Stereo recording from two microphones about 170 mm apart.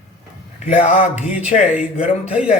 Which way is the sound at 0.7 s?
45° left (ahead or behind).